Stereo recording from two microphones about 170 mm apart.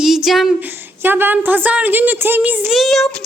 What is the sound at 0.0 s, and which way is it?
A woman's voice, centre (ahead or behind).